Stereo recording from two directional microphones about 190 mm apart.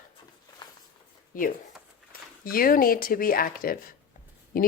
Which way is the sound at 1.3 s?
45° left (ahead or behind).